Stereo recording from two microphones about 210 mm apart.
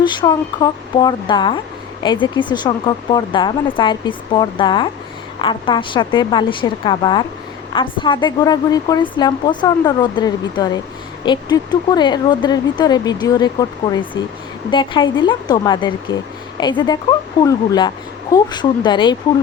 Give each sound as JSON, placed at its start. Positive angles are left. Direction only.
{"t": 0.0, "sound": "a woman's voice", "side_deg": 20}